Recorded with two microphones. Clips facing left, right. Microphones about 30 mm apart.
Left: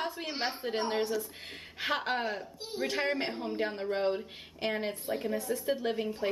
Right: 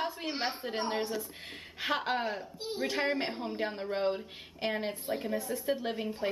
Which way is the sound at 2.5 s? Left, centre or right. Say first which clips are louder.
Right 2 dB; centre.